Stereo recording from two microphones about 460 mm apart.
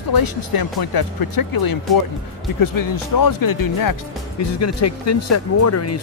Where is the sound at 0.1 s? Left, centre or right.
Left.